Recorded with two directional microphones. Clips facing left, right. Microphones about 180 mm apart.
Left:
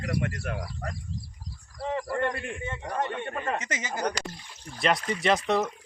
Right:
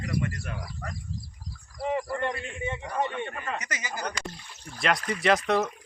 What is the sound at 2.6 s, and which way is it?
Speech, 15° right (ahead or behind).